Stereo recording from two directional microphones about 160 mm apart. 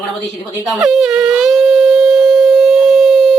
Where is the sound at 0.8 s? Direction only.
Centre (ahead or behind).